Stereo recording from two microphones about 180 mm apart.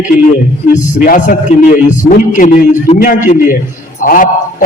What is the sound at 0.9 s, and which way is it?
A man's voice, 50° left (ahead or behind).